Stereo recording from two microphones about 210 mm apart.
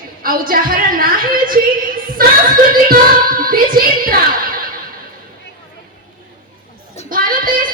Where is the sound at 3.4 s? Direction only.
45° right (ahead or behind).